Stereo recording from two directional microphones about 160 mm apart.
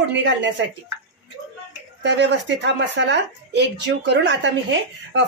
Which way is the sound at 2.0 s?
90° right.